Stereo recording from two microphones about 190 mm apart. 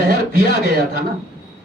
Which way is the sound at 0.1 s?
50° right (ahead or behind).